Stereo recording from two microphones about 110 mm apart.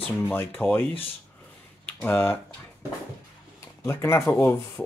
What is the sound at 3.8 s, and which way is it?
Speech, 25° left (ahead or behind).